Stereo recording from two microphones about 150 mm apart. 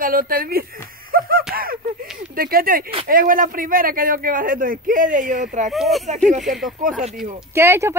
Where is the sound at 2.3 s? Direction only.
75° right (ahead or behind); by 5.7 s 55° right (ahead or behind).